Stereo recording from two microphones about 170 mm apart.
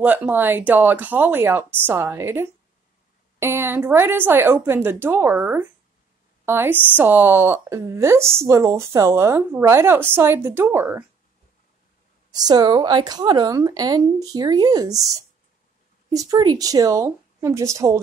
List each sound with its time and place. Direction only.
0.0 s speech: 10° right (ahead or behind)
12.3 s speech: 25° right (ahead or behind)